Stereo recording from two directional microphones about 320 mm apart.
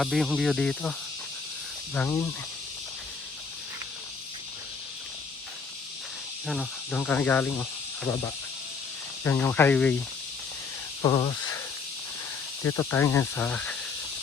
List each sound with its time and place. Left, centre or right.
0.0 s speech: centre
2.0 s speech: centre
6.5 s speech: centre
9.2 s speech: centre
11.0 s snake: centre
12.6 s speech: centre